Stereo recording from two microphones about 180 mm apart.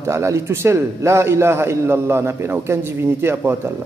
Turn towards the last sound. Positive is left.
turn(degrees=-15)  # may be behind; listen again after turning